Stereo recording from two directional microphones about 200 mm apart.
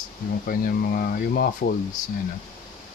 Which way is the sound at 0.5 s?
45° left (ahead or behind).